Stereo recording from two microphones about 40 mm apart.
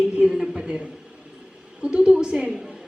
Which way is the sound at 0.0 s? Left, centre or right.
Right.